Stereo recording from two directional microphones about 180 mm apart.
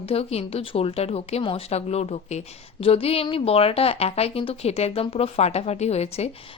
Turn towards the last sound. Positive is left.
turn(degrees=35)  # may be behind; listen again after turning